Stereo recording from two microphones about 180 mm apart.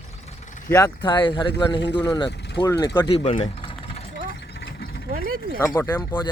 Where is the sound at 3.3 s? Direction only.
35° left (ahead or behind).